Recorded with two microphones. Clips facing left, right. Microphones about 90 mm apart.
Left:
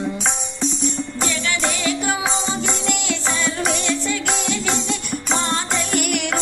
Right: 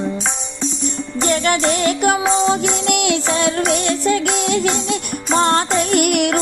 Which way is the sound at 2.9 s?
60° right (ahead or behind).